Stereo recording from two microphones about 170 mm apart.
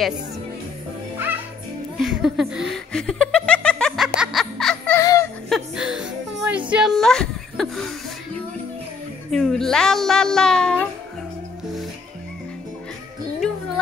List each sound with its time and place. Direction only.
1.1 s music: 10° right (ahead or behind)
2.0 s laughter: centre (ahead or behind)
4.9 s music: 20° left (ahead or behind)
5.5 s music: 5° right (ahead or behind)
6.7 s a sound: centre (ahead or behind)
9.3 s speech: centre (ahead or behind)